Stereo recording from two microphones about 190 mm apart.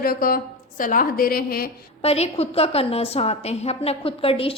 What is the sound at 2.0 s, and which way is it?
A woman's voice, 35° left (ahead or behind).